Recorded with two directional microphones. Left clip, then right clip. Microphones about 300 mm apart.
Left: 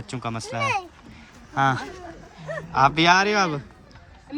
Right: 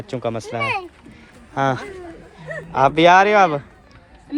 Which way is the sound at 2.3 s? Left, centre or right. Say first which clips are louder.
Right 1 dB; centre.